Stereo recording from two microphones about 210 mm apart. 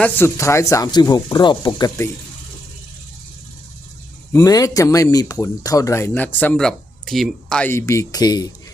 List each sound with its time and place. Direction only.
0.0 s speech: 10° left (ahead or behind)
4.3 s speech: 15° left (ahead or behind)